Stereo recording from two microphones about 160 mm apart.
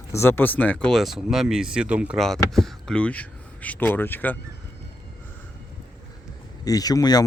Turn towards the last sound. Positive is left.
turn(degrees=25)  # may be behind; listen again after turning